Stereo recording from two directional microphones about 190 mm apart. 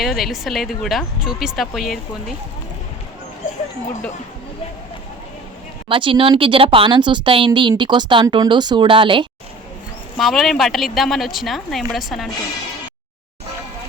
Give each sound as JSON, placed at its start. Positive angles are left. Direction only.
{"t": 0.0, "sound": "speech", "side_deg": 0}
{"t": 5.9, "sound": "speech", "side_deg": -25}
{"t": 10.2, "sound": "speech", "side_deg": 0}